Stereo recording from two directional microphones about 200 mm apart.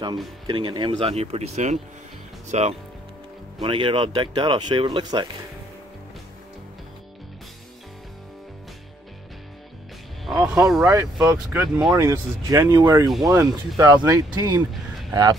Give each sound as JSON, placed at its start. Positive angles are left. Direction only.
{"t": 0.5, "sound": "speech", "side_deg": -25}
{"t": 10.2, "sound": "music", "side_deg": -5}
{"t": 10.8, "sound": "speech", "side_deg": -15}
{"t": 11.6, "sound": "speech", "side_deg": -5}
{"t": 11.9, "sound": "speech", "side_deg": -15}
{"t": 14.7, "sound": "a sound", "side_deg": 0}